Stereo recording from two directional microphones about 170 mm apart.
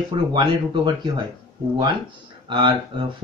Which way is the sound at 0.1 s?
25° right (ahead or behind).